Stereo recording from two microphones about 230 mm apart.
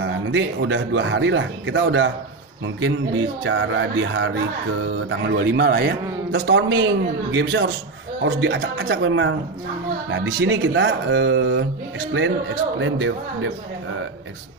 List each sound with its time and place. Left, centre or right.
0.0 s speech: right
12.7 s speech: right